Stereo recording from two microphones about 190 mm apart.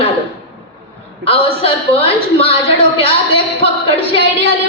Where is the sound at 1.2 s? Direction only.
30° left (ahead or behind).